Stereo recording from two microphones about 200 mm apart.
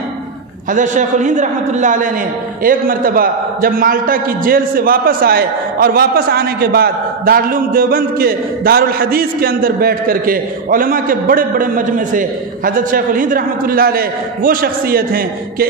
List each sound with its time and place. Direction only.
0.7 s a man's voice: 40° right (ahead or behind)